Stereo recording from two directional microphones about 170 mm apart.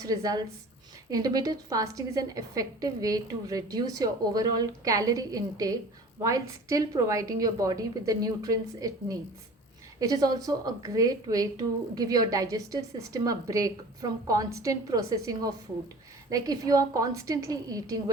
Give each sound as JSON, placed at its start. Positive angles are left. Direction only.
{"t": 0.0, "sound": "a woman's voice", "side_deg": -20}